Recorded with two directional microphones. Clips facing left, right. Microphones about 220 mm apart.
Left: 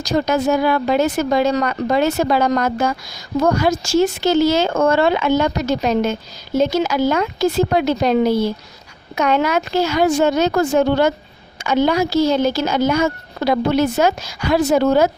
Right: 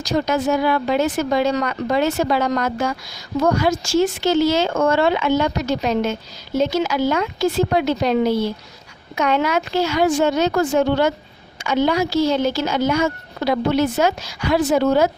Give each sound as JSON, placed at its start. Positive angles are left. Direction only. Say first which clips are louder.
{"t": 0.0, "sound": "speech", "louder": "left 2 dB", "side_deg": 40}